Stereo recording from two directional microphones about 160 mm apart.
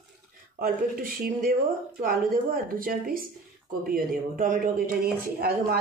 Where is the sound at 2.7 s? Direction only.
60° right (ahead or behind).